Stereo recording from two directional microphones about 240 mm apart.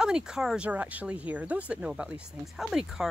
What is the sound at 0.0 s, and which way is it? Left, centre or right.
Speech, centre.